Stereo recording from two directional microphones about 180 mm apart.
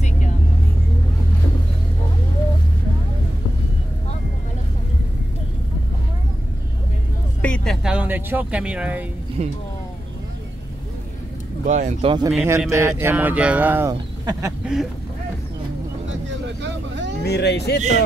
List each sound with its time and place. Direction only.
7.4 s music: 5° left (ahead or behind)
9.4 s speech: 35° right (ahead or behind)
11.6 s speech: 40° right (ahead or behind)
12.4 s speech: 15° right (ahead or behind)
14.6 s speech: 5° right (ahead or behind)
16.6 s vehicle: 80° right
17.2 s speech: 65° left (ahead or behind)